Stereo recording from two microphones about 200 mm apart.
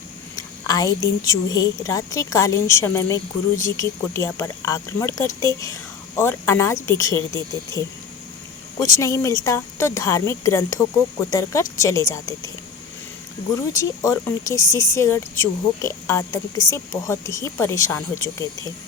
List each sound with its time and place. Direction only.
0.3 s a woman's voice: 20° left (ahead or behind)
7.3 s speech: 20° right (ahead or behind)
8.8 s a woman's voice: 15° left (ahead or behind)
13.7 s a woman's voice: 15° left (ahead or behind)